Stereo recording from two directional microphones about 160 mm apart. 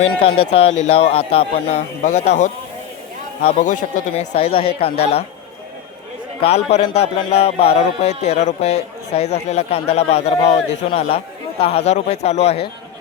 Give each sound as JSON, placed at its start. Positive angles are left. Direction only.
{"t": 0.2, "sound": "a man's voice", "side_deg": 35}
{"t": 2.0, "sound": "speech", "side_deg": 50}
{"t": 4.4, "sound": "a man's voice", "side_deg": 35}
{"t": 6.4, "sound": "a man's voice", "side_deg": 40}